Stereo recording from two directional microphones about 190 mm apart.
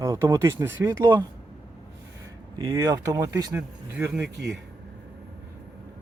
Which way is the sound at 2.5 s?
15° right (ahead or behind).